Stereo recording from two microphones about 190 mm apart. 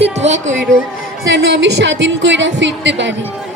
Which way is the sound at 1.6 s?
65° right (ahead or behind).